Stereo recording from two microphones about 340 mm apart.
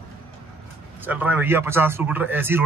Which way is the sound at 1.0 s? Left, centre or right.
Centre.